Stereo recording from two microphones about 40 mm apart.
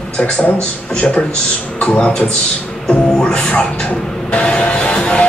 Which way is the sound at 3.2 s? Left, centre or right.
Left.